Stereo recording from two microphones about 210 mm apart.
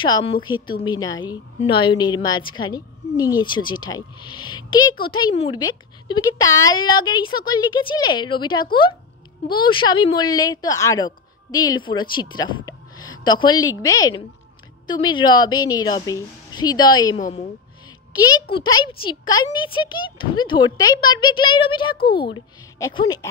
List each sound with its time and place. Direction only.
0.0 s a woman's voice: 25° left (ahead or behind)
17.2 s a woman's voice: 35° left (ahead or behind)
18.5 s speech: 20° left (ahead or behind)
21.9 s speech: 45° left (ahead or behind)
22.3 s a woman's voice: 20° left (ahead or behind)